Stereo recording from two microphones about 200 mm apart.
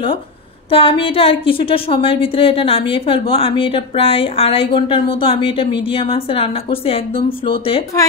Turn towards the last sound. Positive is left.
turn(degrees=30)  # may be behind; listen again after turning